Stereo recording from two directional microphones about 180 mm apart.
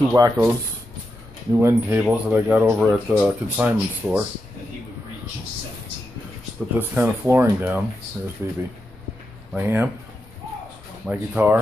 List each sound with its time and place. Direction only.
0.1 s speech: 15° right (ahead or behind)
1.6 s speech: 15° right (ahead or behind)
6.8 s speech: 10° right (ahead or behind)
11.1 s speech: 10° right (ahead or behind)